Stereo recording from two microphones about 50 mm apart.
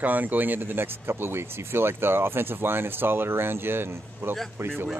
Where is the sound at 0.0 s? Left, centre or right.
Right.